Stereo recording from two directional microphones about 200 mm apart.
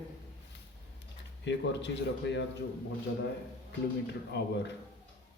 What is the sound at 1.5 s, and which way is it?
Speech, 65° left (ahead or behind).